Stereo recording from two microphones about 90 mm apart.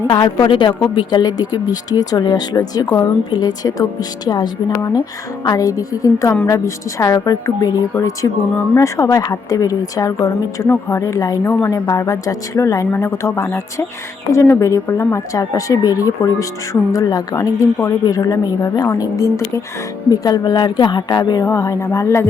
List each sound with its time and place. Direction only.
0.2 s a woman's voice: 65° left (ahead or behind)
0.9 s speech: 50° left (ahead or behind)
5.5 s speech: 40° left (ahead or behind)
10.7 s speech: 30° left (ahead or behind); by 21.4 s 50° left (ahead or behind)
21.4 s speech: 35° left (ahead or behind)